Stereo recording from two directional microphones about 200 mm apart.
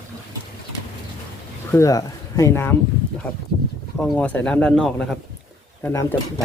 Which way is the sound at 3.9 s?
5° left (ahead or behind).